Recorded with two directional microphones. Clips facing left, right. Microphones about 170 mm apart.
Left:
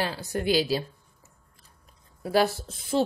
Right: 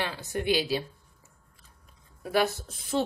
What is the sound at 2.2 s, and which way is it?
Speech, 30° left (ahead or behind).